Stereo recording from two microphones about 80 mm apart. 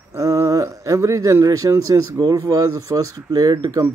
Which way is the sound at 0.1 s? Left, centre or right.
Right.